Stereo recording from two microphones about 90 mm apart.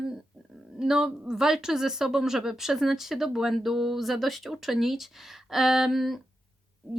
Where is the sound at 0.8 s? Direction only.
5° right (ahead or behind).